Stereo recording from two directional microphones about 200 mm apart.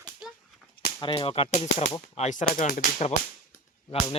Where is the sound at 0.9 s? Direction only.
25° left (ahead or behind).